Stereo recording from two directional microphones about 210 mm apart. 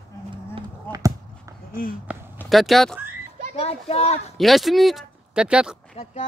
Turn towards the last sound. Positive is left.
turn(degrees=30)  # may be behind; listen again after turning